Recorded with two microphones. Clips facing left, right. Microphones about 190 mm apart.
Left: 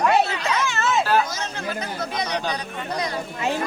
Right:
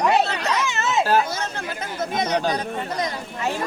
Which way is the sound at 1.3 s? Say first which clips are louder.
Even; 55° right (ahead or behind).